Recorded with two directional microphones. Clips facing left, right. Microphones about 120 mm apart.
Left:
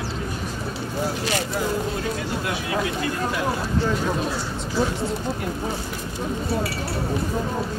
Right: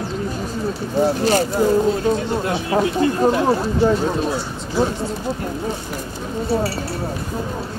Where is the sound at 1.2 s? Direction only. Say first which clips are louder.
Right 8 dB; 35° right (ahead or behind).